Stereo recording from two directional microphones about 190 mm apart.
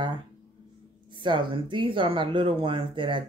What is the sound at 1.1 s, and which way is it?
A child's voice, 25° right (ahead or behind).